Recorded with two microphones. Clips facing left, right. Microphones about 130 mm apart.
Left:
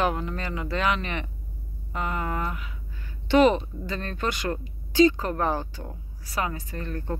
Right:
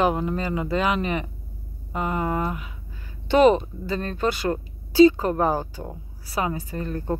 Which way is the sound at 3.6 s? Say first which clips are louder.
Right 5 dB; 5° right (ahead or behind).